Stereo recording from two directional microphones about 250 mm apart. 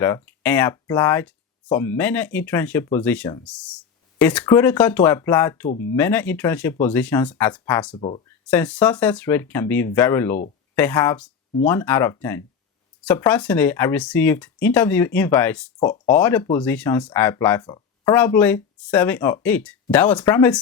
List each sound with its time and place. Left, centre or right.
0.3 s speech: centre
5.7 s speech: left
6.0 s speech: centre
7.9 s speech: left
8.4 s speech: centre